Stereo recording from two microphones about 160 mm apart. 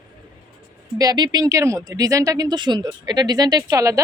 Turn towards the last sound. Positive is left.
turn(degrees=-20)  # may be behind; listen again after turning